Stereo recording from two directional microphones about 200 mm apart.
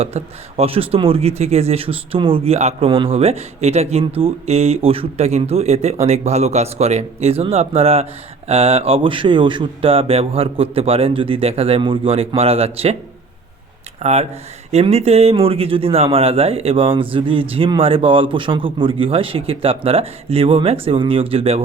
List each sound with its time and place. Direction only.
0.0 s speech: 30° right (ahead or behind)
14.0 s speech: 35° right (ahead or behind)